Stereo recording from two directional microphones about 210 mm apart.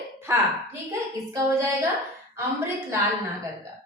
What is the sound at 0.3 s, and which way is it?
Speech, 10° right (ahead or behind).